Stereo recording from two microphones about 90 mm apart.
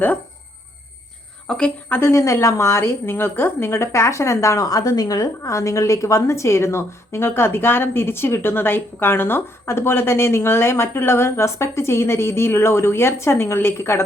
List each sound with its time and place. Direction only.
1.5 s a woman's voice: 10° left (ahead or behind)
2.0 s a woman's voice: 30° left (ahead or behind)